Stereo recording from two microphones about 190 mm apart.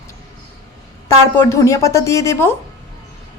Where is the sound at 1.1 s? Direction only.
15° left (ahead or behind).